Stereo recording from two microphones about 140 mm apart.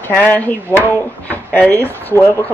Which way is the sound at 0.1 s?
15° left (ahead or behind).